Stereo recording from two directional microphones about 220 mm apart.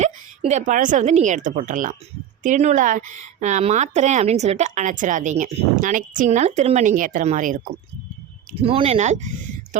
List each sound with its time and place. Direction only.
0.0 s a woman's voice: 30° right (ahead or behind)